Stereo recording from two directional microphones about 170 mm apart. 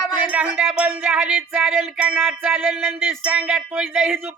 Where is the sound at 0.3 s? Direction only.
10° right (ahead or behind).